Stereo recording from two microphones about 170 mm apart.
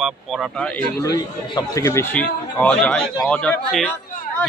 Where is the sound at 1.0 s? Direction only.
20° left (ahead or behind).